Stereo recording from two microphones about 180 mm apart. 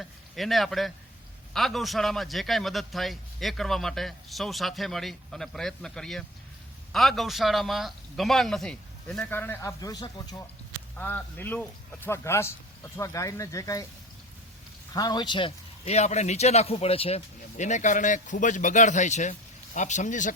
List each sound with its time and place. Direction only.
0.0 s a man's voice: centre (ahead or behind); by 10.5 s 20° left (ahead or behind)
10.9 s speech: 10° left (ahead or behind)
14.9 s a man's voice: 20° left (ahead or behind); by 20.3 s 45° left (ahead or behind)